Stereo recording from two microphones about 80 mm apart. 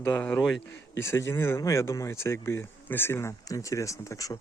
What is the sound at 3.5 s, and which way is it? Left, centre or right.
Speech, left.